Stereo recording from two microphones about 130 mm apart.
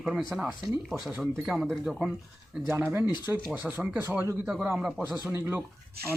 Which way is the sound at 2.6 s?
15° right (ahead or behind).